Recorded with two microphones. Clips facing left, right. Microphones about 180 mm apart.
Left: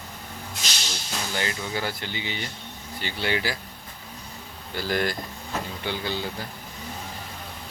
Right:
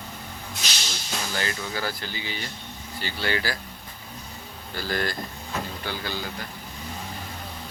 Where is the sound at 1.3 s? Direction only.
20° left (ahead or behind).